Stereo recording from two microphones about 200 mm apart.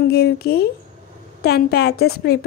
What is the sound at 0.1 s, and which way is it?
A woman's voice, 55° left (ahead or behind).